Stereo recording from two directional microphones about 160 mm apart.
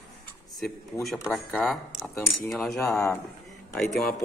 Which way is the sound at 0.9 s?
15° left (ahead or behind).